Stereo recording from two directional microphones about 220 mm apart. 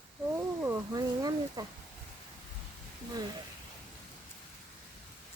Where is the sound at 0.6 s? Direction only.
10° right (ahead or behind).